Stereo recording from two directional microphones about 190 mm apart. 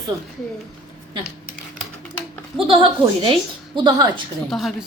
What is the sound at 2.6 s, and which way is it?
Speech, 25° right (ahead or behind).